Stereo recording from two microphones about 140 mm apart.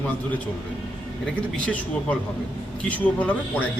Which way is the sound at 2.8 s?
10° left (ahead or behind).